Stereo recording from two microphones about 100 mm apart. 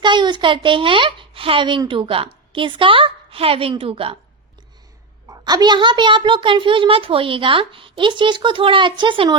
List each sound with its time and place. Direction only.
0.0 s a woman's voice: 50° right (ahead or behind); by 4.2 s 75° right (ahead or behind)
5.3 s a woman's voice: 40° right (ahead or behind)